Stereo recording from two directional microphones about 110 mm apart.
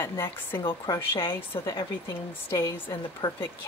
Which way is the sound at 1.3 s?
25° left (ahead or behind).